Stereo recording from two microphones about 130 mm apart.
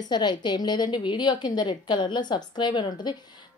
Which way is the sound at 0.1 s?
35° left (ahead or behind).